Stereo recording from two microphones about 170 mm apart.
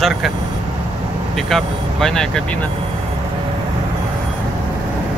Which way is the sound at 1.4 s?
Centre (ahead or behind).